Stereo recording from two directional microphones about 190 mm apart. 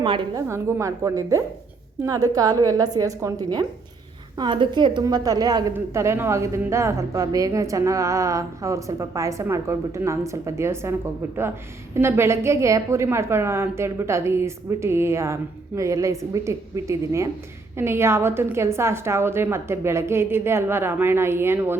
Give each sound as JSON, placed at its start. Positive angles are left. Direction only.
{"t": 0.0, "sound": "a woman's voice", "side_deg": -25}
{"t": 0.4, "sound": "a woman's voice", "side_deg": -15}